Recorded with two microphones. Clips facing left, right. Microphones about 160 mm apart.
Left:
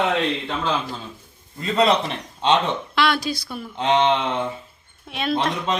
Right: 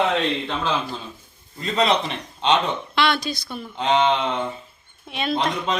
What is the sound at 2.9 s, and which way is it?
A woman's voice, 5° left (ahead or behind).